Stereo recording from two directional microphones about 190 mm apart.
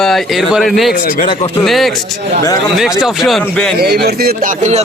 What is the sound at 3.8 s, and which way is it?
Speech, 55° right (ahead or behind).